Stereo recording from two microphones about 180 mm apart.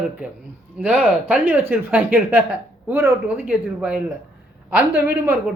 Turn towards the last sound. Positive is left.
turn(degrees=-10)  # may be behind; listen again after turning